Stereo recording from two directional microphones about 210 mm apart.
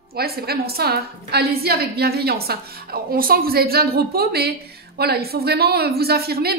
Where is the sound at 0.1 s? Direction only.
45° right (ahead or behind).